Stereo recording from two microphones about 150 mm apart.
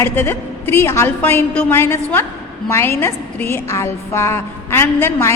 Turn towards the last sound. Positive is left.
turn(degrees=15)  # may be behind; listen again after turning